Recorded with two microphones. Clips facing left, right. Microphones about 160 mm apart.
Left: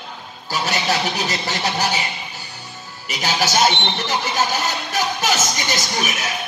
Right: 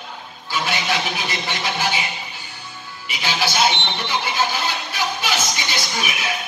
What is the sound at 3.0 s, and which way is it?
Speech, 45° left (ahead or behind).